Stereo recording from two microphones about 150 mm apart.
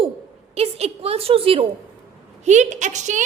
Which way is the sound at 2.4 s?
55° right (ahead or behind).